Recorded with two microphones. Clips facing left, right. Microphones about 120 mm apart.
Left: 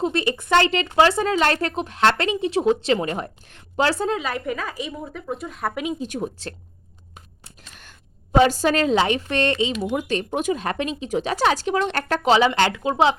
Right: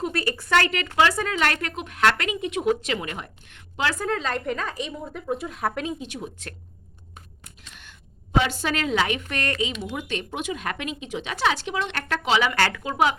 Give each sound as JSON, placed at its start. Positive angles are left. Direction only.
{"t": 0.0, "sound": "speech", "side_deg": 25}
{"t": 4.1, "sound": "a woman's voice", "side_deg": 10}
{"t": 6.0, "sound": "a woman's voice", "side_deg": 40}
{"t": 8.4, "sound": "speech", "side_deg": 40}
{"t": 9.9, "sound": "speech", "side_deg": 40}
{"t": 12.5, "sound": "speech", "side_deg": 20}